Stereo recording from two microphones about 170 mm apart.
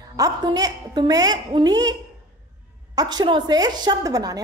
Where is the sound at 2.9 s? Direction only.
25° right (ahead or behind).